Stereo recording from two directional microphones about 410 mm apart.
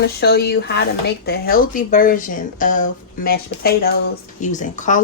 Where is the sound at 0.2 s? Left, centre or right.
Left.